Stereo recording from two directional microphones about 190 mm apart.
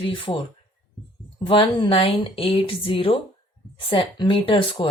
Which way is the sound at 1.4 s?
25° left (ahead or behind).